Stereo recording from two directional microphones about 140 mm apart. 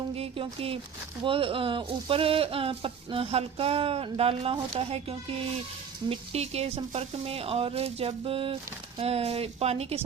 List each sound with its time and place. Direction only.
0.1 s speech: 45° right (ahead or behind)